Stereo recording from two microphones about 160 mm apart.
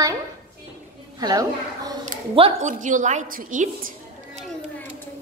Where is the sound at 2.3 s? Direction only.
35° right (ahead or behind).